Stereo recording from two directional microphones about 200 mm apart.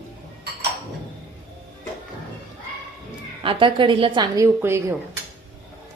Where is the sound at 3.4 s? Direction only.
25° right (ahead or behind).